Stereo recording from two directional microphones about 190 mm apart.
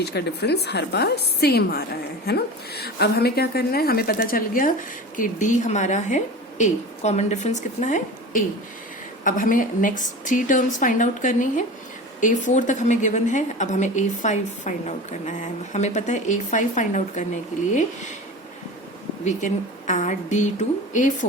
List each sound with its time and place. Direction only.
0.0 s a woman's voice: 60° left (ahead or behind); by 17.8 s 40° left (ahead or behind)
19.2 s a woman's voice: 40° left (ahead or behind)